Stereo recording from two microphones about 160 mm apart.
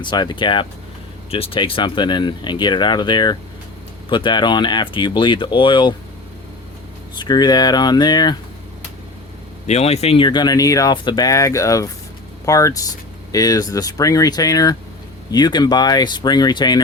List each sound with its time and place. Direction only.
0.0 s speech: 30° left (ahead or behind)
7.2 s speech: 25° left (ahead or behind)
9.6 s speech: 40° left (ahead or behind)